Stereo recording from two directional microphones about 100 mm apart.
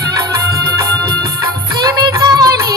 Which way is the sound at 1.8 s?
40° right (ahead or behind).